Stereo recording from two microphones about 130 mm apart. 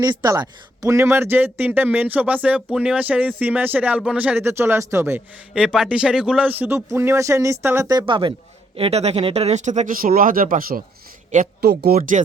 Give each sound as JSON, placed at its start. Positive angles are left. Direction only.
{"t": 0.0, "sound": "speech", "side_deg": -30}
{"t": 5.5, "sound": "speech", "side_deg": -5}
{"t": 8.7, "sound": "speech", "side_deg": -50}
{"t": 11.9, "sound": "speech", "side_deg": -70}